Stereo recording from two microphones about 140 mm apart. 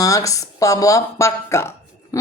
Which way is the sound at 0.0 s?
25° left (ahead or behind).